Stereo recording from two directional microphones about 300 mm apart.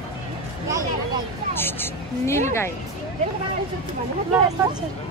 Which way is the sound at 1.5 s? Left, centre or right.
Centre.